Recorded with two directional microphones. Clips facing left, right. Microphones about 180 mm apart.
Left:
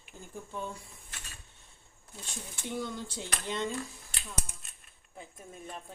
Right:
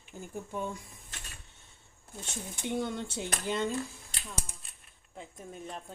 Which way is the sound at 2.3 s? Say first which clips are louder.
Right 4 dB; 25° right (ahead or behind).